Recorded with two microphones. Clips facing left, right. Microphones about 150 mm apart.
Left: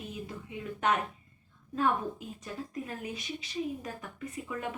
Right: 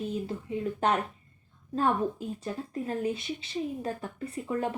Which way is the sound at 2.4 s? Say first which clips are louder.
Right 4 dB; 30° right (ahead or behind).